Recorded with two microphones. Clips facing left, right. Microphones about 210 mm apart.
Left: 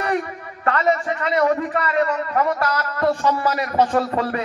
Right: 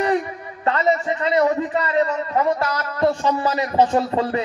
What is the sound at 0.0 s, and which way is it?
A man's voice, 25° right (ahead or behind).